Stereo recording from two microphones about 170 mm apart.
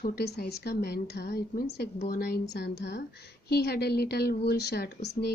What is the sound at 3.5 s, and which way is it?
Speech, 70° left (ahead or behind).